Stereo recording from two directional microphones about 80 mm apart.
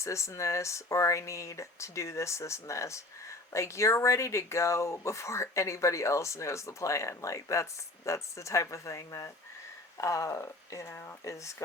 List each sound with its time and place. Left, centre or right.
0.0 s speech: left